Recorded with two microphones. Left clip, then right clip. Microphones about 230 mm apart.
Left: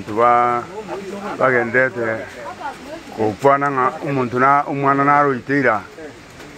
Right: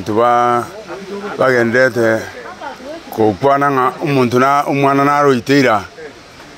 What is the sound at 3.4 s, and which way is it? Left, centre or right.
Speech, right.